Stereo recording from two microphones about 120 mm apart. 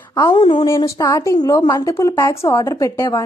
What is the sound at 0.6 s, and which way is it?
A woman's voice, 25° left (ahead or behind).